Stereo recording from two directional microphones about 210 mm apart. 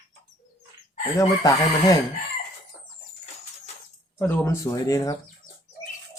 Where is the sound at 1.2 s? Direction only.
15° left (ahead or behind).